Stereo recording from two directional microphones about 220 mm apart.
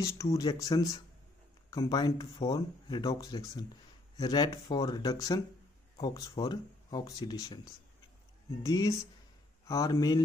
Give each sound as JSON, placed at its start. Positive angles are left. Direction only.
{"t": 0.0, "sound": "speech", "side_deg": 15}
{"t": 8.6, "sound": "speech", "side_deg": 15}